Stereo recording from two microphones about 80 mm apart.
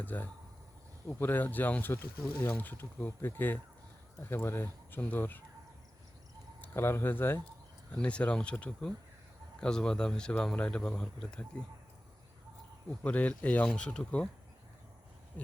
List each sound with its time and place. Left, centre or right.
0.0 s speech: left
6.6 s speech: left
7.9 s speech: centre
13.0 s speech: centre